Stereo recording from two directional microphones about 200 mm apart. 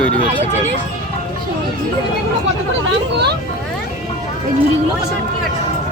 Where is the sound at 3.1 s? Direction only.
55° right (ahead or behind).